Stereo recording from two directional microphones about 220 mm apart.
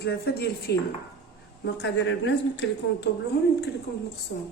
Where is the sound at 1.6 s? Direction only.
55° left (ahead or behind).